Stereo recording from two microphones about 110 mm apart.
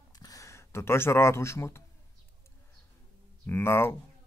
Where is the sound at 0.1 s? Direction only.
35° left (ahead or behind).